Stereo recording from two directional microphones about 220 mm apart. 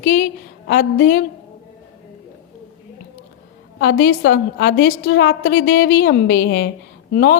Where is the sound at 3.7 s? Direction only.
55° left (ahead or behind).